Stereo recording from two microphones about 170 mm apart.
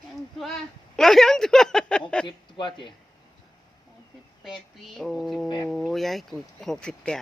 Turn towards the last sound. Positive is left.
turn(degrees=5)  # may be behind; listen again after turning